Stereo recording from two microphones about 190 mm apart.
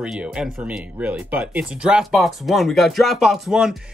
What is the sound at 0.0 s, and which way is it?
Speech, 5° right (ahead or behind).